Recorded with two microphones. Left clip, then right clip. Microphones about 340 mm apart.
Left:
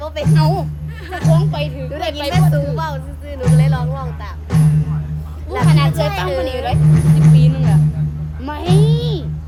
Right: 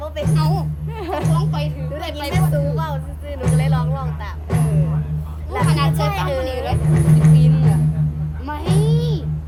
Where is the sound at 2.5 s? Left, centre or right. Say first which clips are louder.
Left 2 dB; centre.